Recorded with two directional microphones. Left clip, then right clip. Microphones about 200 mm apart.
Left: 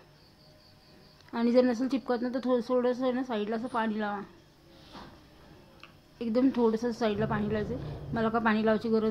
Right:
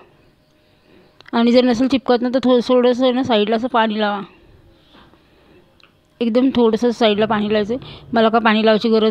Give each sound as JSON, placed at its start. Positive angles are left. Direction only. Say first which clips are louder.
{"t": 1.2, "sound": "speech", "louder": "right 11 dB", "side_deg": -45}
{"t": 6.1, "sound": "speech", "louder": "right 12 dB", "side_deg": -40}